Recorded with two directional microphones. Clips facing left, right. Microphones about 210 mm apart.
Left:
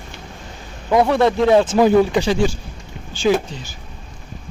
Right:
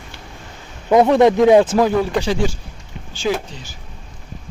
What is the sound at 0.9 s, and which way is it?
Speech, 20° right (ahead or behind).